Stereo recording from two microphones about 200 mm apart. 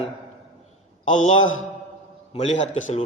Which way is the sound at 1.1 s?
40° left (ahead or behind).